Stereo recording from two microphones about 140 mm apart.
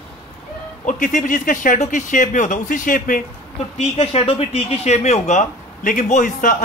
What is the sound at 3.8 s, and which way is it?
Speech, 40° left (ahead or behind).